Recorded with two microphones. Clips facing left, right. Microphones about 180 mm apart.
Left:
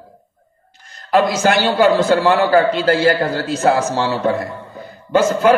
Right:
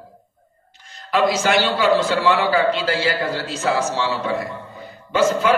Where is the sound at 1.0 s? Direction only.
45° left (ahead or behind).